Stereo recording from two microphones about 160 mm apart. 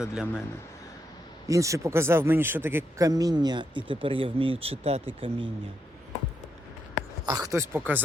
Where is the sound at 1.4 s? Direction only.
20° right (ahead or behind).